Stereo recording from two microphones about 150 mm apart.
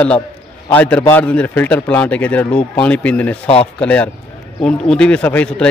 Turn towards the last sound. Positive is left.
turn(degrees=10)  # may be behind; listen again after turning